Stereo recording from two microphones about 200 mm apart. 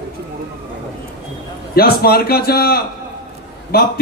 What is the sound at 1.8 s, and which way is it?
A man's voice, 50° left (ahead or behind).